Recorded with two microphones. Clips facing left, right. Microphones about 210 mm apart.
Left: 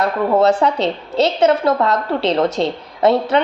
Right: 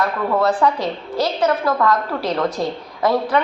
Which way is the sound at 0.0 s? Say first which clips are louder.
Left 4 dB; 20° left (ahead or behind).